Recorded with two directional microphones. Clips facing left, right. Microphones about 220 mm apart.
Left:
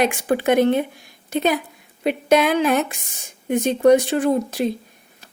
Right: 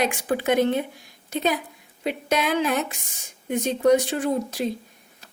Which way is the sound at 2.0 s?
60° left (ahead or behind).